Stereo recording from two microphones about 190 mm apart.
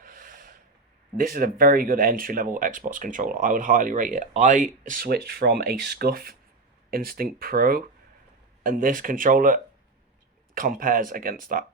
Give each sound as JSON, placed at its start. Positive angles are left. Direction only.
{"t": 0.0, "sound": "snort", "side_deg": -45}
{"t": 1.1, "sound": "speech", "side_deg": -50}